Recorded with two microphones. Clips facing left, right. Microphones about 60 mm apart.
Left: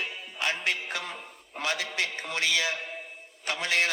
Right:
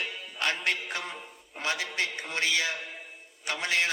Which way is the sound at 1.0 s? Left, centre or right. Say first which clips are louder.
Even; right.